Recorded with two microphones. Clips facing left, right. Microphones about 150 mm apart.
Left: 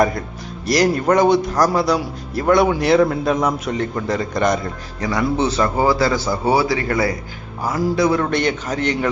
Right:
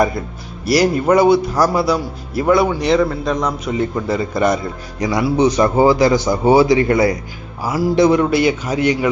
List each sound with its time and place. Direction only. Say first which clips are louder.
0.6 s a man's voice: right 2 dB; 5° right (ahead or behind)
4.9 s a man's voice: right 4 dB; 15° right (ahead or behind)
7.6 s a man's voice: right 2 dB; 5° right (ahead or behind)
7.9 s a man's voice: right 6 dB; 20° right (ahead or behind)
8.3 s a man's voice: right 4 dB; 5° right (ahead or behind)